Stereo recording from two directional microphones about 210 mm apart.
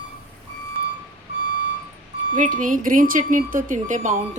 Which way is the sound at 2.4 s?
40° right (ahead or behind).